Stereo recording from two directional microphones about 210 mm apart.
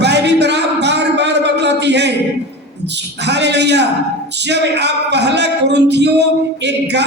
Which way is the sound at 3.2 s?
55° right (ahead or behind).